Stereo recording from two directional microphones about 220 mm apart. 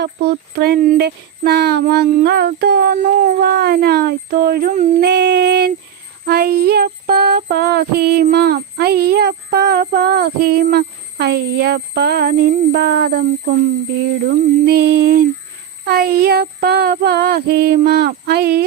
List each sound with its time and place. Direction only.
0.5 s female singing: 45° right (ahead or behind)